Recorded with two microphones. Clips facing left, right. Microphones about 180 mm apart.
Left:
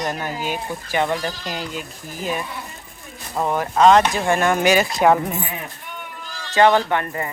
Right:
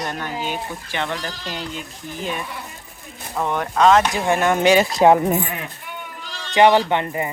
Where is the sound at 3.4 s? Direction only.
5° left (ahead or behind).